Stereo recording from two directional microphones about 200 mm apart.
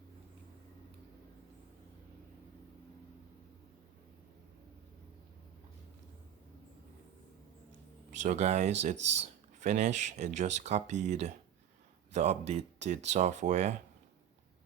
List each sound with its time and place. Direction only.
8.1 s speech: 35° right (ahead or behind)
9.0 s speech: 65° right (ahead or behind)
9.2 s speech: 35° right (ahead or behind)